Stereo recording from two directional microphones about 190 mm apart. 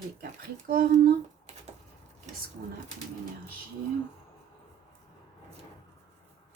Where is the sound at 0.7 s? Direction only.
50° right (ahead or behind).